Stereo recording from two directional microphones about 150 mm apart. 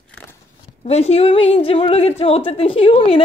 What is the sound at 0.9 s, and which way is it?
A child's voice, 45° left (ahead or behind).